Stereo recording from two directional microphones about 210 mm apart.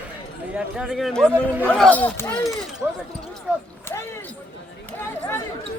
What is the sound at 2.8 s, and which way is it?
Speech, 10° right (ahead or behind).